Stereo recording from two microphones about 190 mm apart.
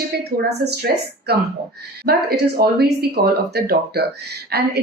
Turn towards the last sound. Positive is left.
turn(degrees=-55)  # may be behind; listen again after turning